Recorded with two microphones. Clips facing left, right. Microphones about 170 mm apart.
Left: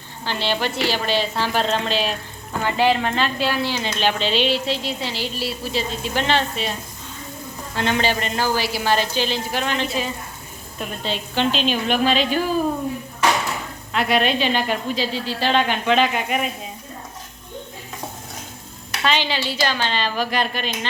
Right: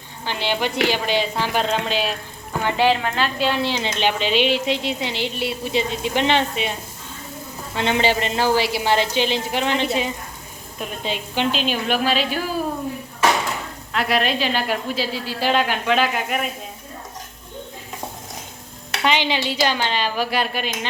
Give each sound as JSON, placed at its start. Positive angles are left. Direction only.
{"t": 0.3, "sound": "a woman's voice", "side_deg": -15}
{"t": 7.8, "sound": "a woman's voice", "side_deg": -25}
{"t": 10.8, "sound": "speech", "side_deg": -10}
{"t": 13.9, "sound": "a woman's voice", "side_deg": 0}
{"t": 19.0, "sound": "speech", "side_deg": -15}